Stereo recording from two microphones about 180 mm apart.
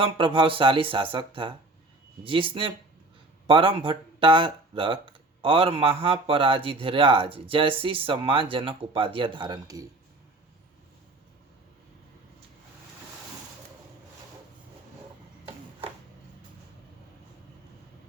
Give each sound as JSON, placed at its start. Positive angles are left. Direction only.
{"t": 0.0, "sound": "speech", "side_deg": -30}
{"t": 2.2, "sound": "speech", "side_deg": -30}